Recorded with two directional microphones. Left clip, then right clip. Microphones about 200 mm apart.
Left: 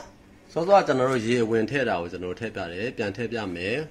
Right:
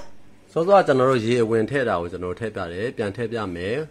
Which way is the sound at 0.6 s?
60° right (ahead or behind).